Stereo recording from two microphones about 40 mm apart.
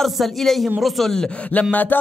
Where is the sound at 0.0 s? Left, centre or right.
Centre.